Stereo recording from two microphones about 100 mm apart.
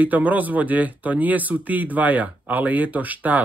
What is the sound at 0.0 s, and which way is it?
Speech, 15° right (ahead or behind).